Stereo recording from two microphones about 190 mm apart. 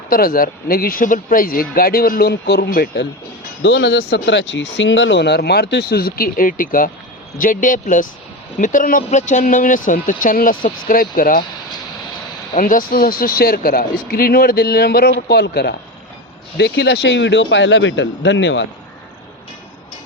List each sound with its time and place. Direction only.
0.1 s speech: 50° left (ahead or behind)
3.6 s speech: 65° left (ahead or behind); by 11.4 s 50° left (ahead or behind)
12.5 s speech: 45° left (ahead or behind); by 18.6 s 70° left (ahead or behind)